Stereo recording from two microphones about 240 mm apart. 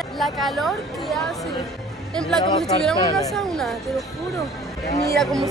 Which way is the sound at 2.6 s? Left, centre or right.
Centre.